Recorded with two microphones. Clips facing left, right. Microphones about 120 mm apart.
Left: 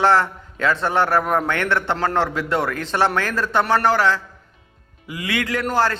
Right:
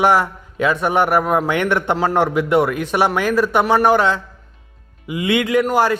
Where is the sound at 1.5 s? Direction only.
15° right (ahead or behind).